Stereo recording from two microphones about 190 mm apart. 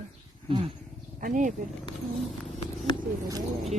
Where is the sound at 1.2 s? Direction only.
40° right (ahead or behind).